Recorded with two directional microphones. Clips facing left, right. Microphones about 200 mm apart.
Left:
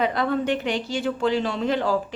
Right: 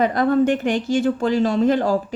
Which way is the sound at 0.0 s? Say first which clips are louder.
Right 6 dB; 45° right (ahead or behind).